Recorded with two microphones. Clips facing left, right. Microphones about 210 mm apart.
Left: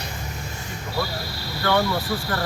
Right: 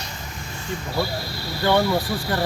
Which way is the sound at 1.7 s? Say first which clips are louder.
Right 2 dB; 20° right (ahead or behind).